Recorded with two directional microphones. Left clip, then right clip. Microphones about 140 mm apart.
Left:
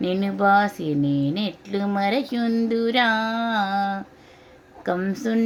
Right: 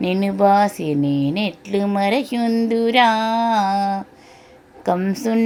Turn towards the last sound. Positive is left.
turn(degrees=-20)  # may be behind; listen again after turning